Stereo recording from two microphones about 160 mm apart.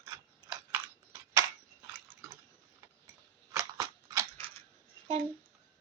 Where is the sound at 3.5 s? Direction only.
20° right (ahead or behind).